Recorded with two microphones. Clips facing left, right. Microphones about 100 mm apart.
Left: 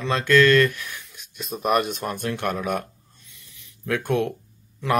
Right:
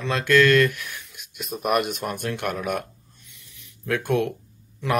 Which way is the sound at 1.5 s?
20° left (ahead or behind).